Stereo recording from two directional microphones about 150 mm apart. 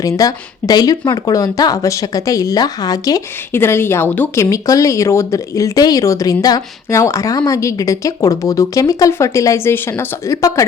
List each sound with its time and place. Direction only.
0.0 s speech: 25° left (ahead or behind)